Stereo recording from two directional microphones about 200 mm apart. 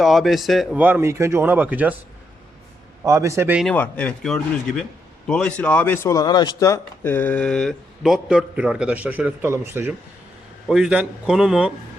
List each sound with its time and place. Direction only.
0.0 s speech: centre (ahead or behind)
3.0 s speech: 15° right (ahead or behind)
3.7 s speech: 5° left (ahead or behind)